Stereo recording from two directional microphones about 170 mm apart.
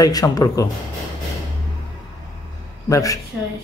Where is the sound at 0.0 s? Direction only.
20° left (ahead or behind).